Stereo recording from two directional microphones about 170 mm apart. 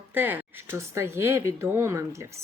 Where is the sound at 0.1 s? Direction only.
10° right (ahead or behind).